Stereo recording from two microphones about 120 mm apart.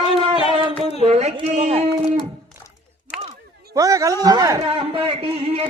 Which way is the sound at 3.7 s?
30° right (ahead or behind).